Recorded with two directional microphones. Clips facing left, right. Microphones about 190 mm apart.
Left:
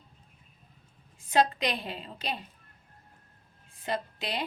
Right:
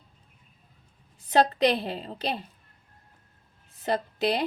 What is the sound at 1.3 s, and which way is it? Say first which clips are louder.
A woman's voice: right 5 dB; 35° right (ahead or behind).